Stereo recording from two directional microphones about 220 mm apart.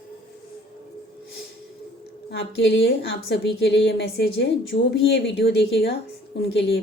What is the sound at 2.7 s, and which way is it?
A woman's voice, 55° left (ahead or behind).